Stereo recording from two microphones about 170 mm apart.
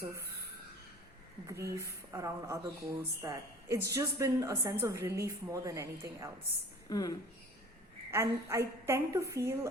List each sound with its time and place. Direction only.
1.5 s a woman's voice: 15° right (ahead or behind)
6.9 s a woman's voice: 20° left (ahead or behind)
8.1 s a woman's voice: 15° right (ahead or behind)